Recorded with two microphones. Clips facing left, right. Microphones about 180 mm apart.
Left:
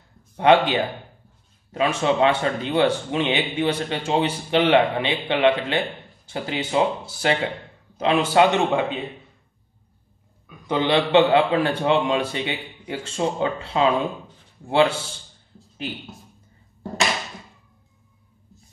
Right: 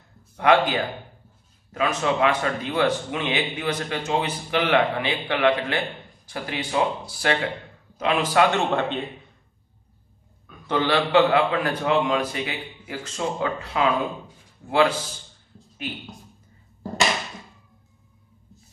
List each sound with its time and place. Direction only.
0.4 s speech: 25° left (ahead or behind)
10.7 s speech: 20° left (ahead or behind)